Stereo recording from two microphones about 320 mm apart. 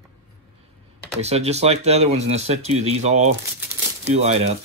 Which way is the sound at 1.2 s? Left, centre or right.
Centre.